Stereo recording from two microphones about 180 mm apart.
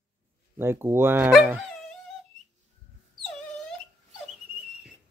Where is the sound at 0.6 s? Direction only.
15° right (ahead or behind).